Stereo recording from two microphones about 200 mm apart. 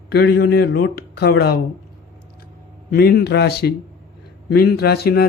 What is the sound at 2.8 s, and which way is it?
Speech, 50° left (ahead or behind).